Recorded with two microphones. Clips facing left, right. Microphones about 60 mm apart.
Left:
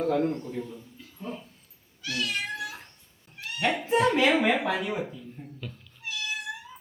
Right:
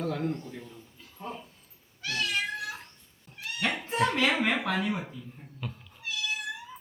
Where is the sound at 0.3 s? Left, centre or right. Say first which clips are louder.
Left 2 dB; centre.